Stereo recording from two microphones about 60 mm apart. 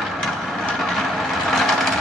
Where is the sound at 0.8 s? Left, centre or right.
Centre.